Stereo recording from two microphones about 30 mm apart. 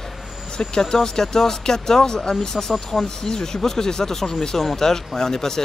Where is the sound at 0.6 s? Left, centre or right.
Left.